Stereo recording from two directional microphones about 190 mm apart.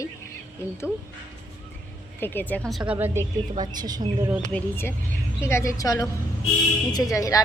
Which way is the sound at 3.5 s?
20° right (ahead or behind).